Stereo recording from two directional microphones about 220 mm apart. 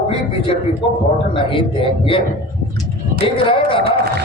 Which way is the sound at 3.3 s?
25° left (ahead or behind).